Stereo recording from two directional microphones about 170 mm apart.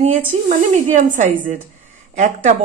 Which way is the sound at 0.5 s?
50° right (ahead or behind).